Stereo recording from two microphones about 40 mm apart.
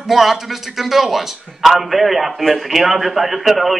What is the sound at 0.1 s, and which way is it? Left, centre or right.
A man's voice, centre.